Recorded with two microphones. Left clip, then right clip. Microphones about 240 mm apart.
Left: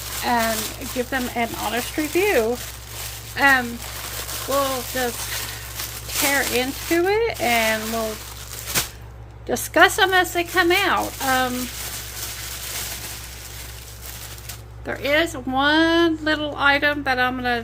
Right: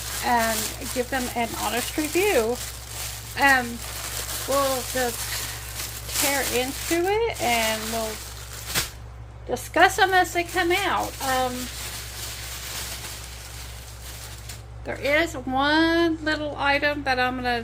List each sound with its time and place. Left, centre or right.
0.2 s speech: centre
6.1 s speech: centre
9.7 s speech: centre
14.8 s speech: centre